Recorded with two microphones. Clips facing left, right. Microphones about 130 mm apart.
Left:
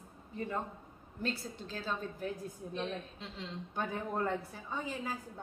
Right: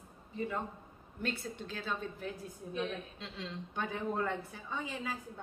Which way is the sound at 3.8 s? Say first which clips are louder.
Even; 40° left (ahead or behind).